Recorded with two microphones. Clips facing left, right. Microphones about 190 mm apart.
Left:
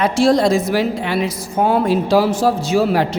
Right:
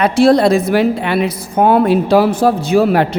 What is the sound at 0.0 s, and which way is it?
A woman's voice, 60° right (ahead or behind).